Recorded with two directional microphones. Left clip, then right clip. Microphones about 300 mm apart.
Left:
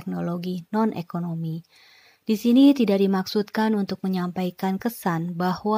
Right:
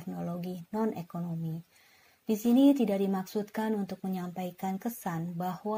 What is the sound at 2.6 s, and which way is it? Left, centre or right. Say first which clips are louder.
Speech: left 8 dB; left.